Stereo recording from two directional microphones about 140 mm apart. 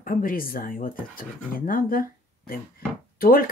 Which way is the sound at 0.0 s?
90° left.